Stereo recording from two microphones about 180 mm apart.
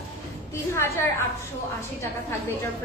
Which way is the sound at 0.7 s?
15° left (ahead or behind).